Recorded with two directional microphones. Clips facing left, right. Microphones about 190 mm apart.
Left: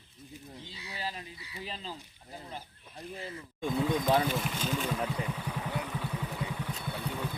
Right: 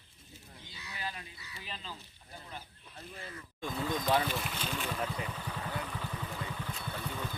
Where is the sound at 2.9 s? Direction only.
20° left (ahead or behind).